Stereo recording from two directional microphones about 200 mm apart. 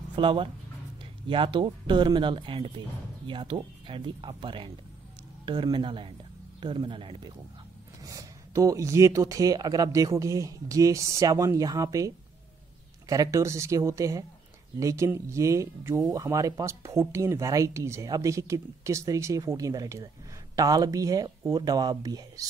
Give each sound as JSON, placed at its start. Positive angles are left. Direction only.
{"t": 0.1, "sound": "speech", "side_deg": -25}
{"t": 13.1, "sound": "speech", "side_deg": -15}